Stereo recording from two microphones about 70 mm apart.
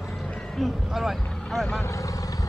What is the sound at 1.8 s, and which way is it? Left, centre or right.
Speech, left.